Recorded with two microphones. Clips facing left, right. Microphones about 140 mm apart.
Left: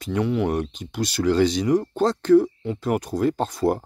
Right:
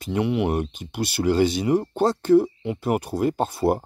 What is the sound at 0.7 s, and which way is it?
Speech, 55° right (ahead or behind).